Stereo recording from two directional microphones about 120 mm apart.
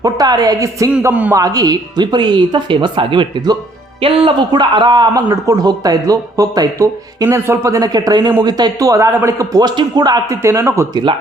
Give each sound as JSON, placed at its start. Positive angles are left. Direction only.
{"t": 0.0, "sound": "a woman's voice", "side_deg": -35}
{"t": 4.0, "sound": "a woman's voice", "side_deg": -50}